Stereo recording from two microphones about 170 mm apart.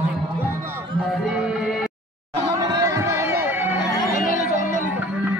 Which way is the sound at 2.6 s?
20° right (ahead or behind).